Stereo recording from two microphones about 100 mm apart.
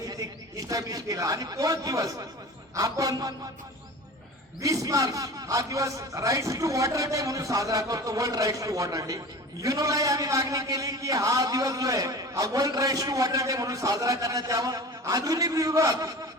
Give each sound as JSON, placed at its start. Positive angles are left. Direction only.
{"t": 0.0, "sound": "a man's voice", "side_deg": -35}
{"t": 4.6, "sound": "a man's voice", "side_deg": -35}